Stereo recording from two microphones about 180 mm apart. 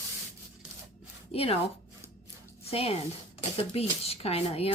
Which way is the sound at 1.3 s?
30° left (ahead or behind).